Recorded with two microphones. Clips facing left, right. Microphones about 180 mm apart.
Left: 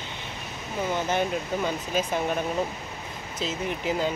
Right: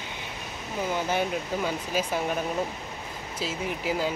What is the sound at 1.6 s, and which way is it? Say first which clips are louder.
Speech: left 1 dB; 5° right (ahead or behind).